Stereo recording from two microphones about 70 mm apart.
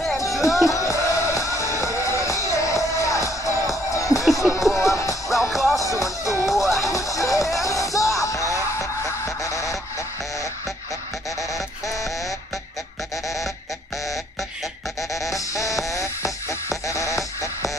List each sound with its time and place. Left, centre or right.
0.6 s music: left
5.3 s music: centre
5.8 s music: left
6.4 s music: centre
6.9 s music: left
11.5 s music: left
15.0 s music: centre
15.3 s music: left